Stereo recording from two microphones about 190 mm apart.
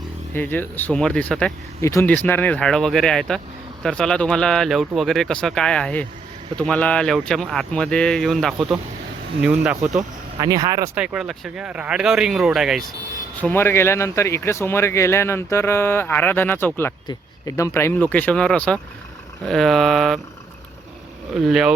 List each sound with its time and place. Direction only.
0.3 s speech: 10° left (ahead or behind); by 10.0 s 5° right (ahead or behind)
10.4 s speech: 20° right (ahead or behind)
11.0 s speech: 5° right (ahead or behind)
13.4 s speech: 10° left (ahead or behind)
21.4 s speech: centre (ahead or behind)